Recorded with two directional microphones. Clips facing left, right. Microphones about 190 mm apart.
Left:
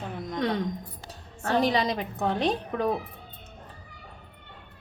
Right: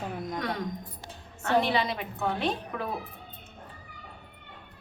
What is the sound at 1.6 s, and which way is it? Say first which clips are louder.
A woman's voice: left 3 dB; 40° left (ahead or behind).